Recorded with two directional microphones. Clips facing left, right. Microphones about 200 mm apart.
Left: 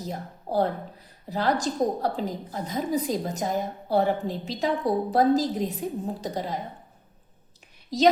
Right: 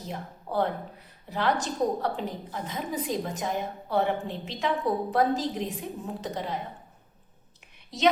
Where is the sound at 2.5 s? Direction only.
40° left (ahead or behind).